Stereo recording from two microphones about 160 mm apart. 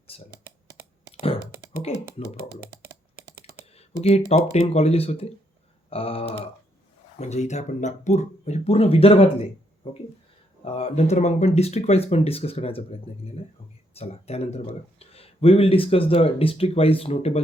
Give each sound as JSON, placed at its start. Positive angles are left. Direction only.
{"t": 0.1, "sound": "speech", "side_deg": 35}
{"t": 1.2, "sound": "computer keyboard", "side_deg": 35}
{"t": 3.8, "sound": "speech", "side_deg": 40}